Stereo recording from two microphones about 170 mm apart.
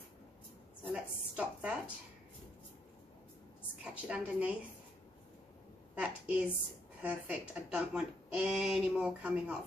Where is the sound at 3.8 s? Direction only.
5° right (ahead or behind).